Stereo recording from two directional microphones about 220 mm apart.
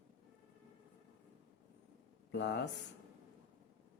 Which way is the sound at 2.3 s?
50° left (ahead or behind).